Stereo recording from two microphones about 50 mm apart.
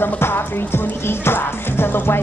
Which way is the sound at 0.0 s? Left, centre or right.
Left.